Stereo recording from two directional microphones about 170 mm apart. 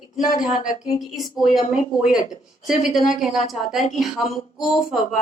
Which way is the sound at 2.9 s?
Centre (ahead or behind).